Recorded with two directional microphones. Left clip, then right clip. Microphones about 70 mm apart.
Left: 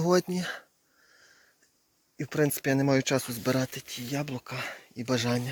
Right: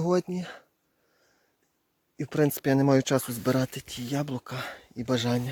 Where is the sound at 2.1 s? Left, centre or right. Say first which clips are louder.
Right 2 dB; right.